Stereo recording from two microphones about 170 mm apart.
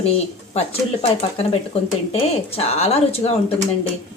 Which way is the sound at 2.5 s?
35° left (ahead or behind).